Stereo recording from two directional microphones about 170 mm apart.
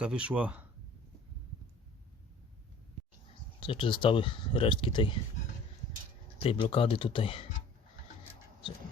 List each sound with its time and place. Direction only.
0.0 s speech: 5° right (ahead or behind)
3.6 s speech: 30° left (ahead or behind)
6.4 s speech: 30° left (ahead or behind)